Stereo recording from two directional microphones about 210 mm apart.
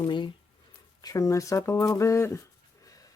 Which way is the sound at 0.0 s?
20° left (ahead or behind).